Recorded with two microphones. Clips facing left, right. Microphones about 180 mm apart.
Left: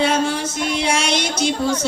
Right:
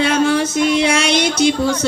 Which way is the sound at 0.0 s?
75° right (ahead or behind).